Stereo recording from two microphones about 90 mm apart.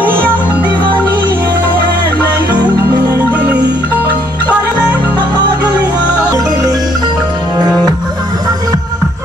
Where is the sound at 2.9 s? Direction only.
50° right (ahead or behind).